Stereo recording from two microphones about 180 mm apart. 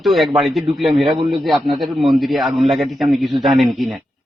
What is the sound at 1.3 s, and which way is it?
Speech, centre (ahead or behind).